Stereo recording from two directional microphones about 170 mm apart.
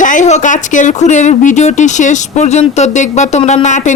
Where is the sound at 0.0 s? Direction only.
50° left (ahead or behind).